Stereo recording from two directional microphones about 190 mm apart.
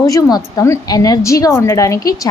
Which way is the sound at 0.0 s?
20° left (ahead or behind).